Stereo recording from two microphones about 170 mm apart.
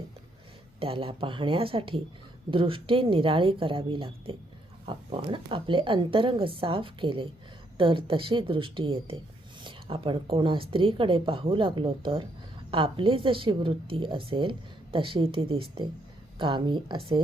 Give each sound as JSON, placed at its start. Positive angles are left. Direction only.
{"t": 0.8, "sound": "a woman's voice", "side_deg": -30}